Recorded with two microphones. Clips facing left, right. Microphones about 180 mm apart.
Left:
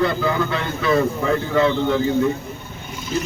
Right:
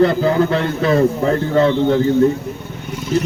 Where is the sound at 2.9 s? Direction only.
70° right (ahead or behind).